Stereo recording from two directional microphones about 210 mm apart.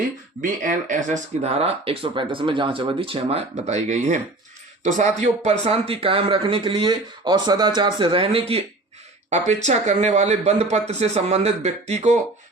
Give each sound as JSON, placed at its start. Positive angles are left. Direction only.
{"t": 0.4, "sound": "speech", "side_deg": -35}